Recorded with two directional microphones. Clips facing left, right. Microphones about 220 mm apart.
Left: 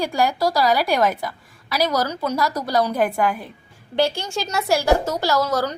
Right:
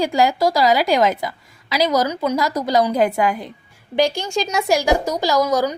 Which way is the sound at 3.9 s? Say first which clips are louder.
Right 3 dB; 15° right (ahead or behind).